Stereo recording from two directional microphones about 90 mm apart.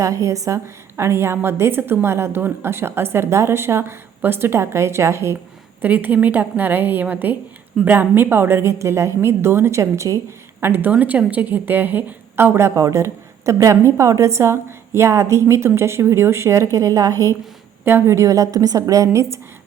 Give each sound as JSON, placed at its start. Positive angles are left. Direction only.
{"t": 0.0, "sound": "a woman's voice", "side_deg": -35}
{"t": 5.8, "sound": "a woman's voice", "side_deg": -20}
{"t": 17.8, "sound": "a woman's voice", "side_deg": -25}